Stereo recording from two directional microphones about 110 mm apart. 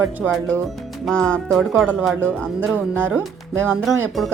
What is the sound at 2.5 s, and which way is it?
Speech, 15° right (ahead or behind).